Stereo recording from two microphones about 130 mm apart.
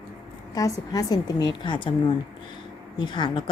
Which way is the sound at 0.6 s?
30° left (ahead or behind).